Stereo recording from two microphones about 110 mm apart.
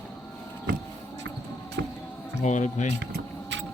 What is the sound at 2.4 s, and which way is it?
Speech, 90° left.